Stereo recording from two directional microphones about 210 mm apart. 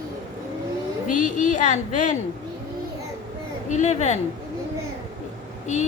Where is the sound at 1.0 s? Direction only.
35° left (ahead or behind).